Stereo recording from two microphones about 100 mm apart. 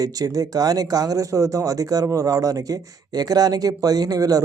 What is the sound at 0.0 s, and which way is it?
Speech, 40° right (ahead or behind).